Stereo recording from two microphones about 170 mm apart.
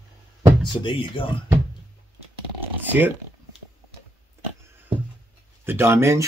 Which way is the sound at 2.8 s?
10° right (ahead or behind).